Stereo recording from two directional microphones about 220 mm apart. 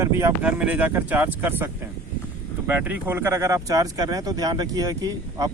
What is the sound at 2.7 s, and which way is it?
Speech, 10° right (ahead or behind).